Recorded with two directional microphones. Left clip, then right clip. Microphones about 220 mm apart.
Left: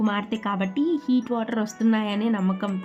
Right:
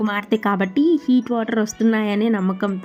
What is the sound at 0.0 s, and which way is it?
Speech, 30° right (ahead or behind).